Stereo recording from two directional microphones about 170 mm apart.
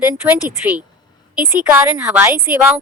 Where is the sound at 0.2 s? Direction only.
10° right (ahead or behind).